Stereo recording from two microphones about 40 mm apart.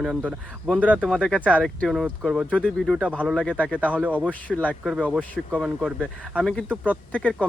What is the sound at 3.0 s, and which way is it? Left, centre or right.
Speech, right.